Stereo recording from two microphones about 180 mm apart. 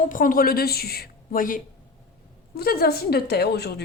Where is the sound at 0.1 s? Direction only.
50° left (ahead or behind).